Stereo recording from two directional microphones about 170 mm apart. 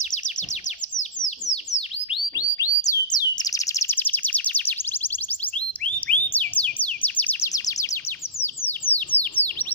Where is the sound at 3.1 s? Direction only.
20° left (ahead or behind).